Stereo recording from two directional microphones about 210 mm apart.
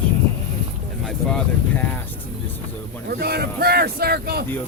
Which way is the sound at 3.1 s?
50° right (ahead or behind).